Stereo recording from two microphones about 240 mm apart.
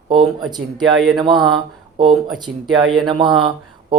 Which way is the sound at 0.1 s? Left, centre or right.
Centre.